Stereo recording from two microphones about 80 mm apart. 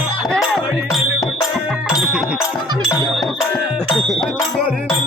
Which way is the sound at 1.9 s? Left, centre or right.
Centre.